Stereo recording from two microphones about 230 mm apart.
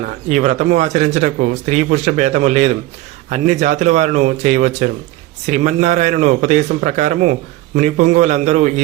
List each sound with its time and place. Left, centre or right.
0.3 s speech: right